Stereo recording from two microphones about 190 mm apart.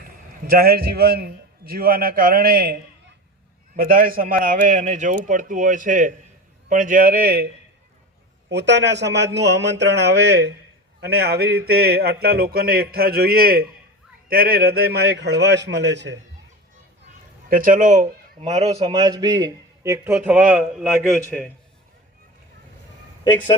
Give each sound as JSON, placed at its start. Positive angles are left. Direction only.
{"t": 0.4, "sound": "a man's voice", "side_deg": -55}
{"t": 3.8, "sound": "a man's voice", "side_deg": -50}
{"t": 8.4, "sound": "speech", "side_deg": -65}
{"t": 17.5, "sound": "a man's voice", "side_deg": -45}
{"t": 18.9, "sound": "a man's voice", "side_deg": -20}
{"t": 20.1, "sound": "a man's voice", "side_deg": -5}